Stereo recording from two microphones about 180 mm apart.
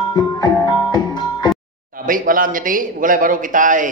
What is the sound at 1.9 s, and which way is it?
Speech, 50° right (ahead or behind).